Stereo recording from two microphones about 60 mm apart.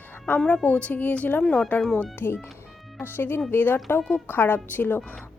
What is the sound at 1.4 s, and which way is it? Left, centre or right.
Speech, centre.